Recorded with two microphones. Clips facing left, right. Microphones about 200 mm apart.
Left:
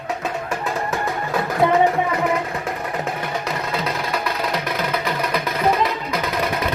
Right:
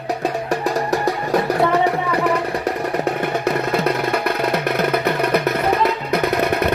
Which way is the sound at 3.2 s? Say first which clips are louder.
Right 6 dB; 60° right (ahead or behind).